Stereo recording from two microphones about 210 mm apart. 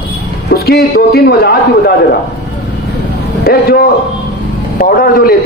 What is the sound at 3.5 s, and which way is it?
A man's voice, 45° left (ahead or behind).